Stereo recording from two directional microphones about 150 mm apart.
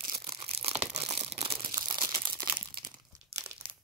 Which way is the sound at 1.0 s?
45° right (ahead or behind).